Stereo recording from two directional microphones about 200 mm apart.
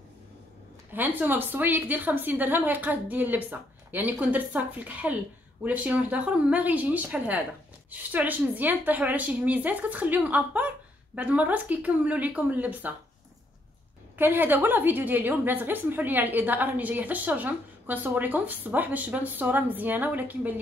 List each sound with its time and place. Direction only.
0.9 s a woman's voice: 10° right (ahead or behind)
14.1 s a woman's voice: 10° right (ahead or behind)